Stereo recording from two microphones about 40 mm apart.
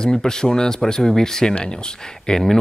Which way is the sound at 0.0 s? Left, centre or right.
Centre.